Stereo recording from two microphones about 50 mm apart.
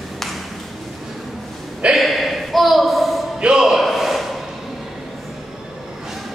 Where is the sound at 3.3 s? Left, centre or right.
Centre.